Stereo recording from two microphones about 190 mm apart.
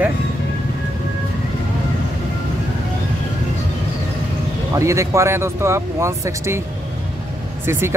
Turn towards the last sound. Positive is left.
turn(degrees=-15)  # may be behind; listen again after turning